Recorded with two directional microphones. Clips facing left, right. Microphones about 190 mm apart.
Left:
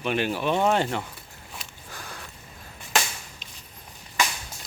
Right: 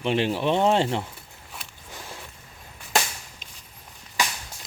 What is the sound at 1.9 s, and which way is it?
Sniff, 25° right (ahead or behind).